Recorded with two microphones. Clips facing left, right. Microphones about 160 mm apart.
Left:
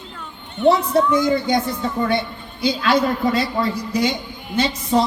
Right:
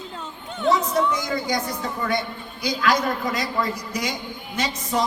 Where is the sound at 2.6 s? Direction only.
25° left (ahead or behind).